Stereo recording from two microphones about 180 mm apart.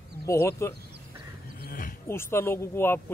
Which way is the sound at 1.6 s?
50° left (ahead or behind).